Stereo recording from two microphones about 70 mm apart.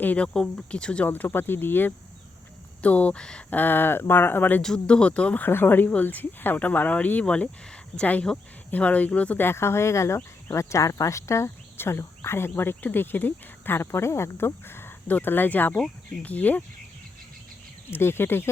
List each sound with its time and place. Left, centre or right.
0.0 s speech: left
2.8 s speech: centre
3.5 s speech: left
4.6 s speech: centre
5.5 s speech: left
9.4 s speech: left
17.9 s speech: left